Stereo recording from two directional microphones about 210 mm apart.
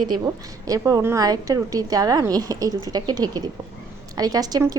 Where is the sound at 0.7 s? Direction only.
15° right (ahead or behind).